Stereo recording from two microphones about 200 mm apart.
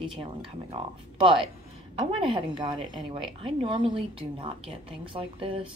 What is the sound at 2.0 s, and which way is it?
A woman's voice, 25° right (ahead or behind).